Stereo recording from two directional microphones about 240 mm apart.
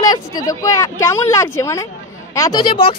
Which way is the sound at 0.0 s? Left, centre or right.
Centre.